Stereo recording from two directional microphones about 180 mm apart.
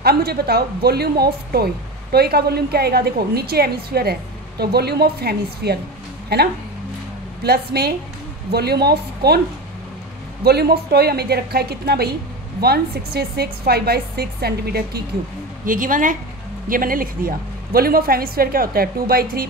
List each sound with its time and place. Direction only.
0.0 s a woman's voice: 60° right (ahead or behind)
10.4 s a woman's voice: 60° right (ahead or behind)
15.6 s a woman's voice: 50° right (ahead or behind)